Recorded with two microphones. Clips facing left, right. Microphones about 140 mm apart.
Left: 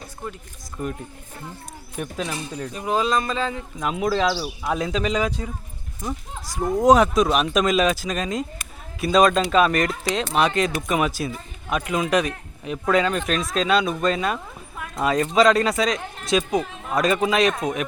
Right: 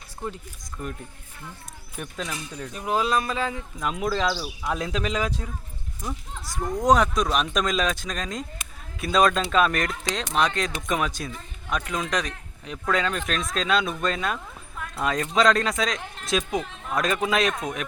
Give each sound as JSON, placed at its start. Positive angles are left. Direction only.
{"t": 0.8, "sound": "speech", "side_deg": 5}
{"t": 2.0, "sound": "speech", "side_deg": 5}
{"t": 2.3, "sound": "speech", "side_deg": 30}
{"t": 2.6, "sound": "speech", "side_deg": 0}
{"t": 6.6, "sound": "speech", "side_deg": 25}
{"t": 6.8, "sound": "speech", "side_deg": 5}
{"t": 14.3, "sound": "a sound", "side_deg": 15}
{"t": 15.0, "sound": "speech", "side_deg": 5}